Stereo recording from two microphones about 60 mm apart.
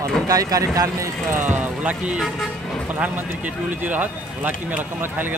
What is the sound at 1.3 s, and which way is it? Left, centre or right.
Speech, right.